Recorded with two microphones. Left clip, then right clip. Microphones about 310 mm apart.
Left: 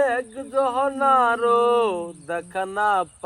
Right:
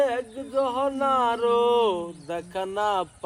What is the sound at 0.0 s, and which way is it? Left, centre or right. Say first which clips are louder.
Speech: left 3 dB; left.